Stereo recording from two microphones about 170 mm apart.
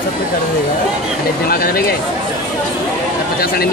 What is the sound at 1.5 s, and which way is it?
Speech, 60° left (ahead or behind).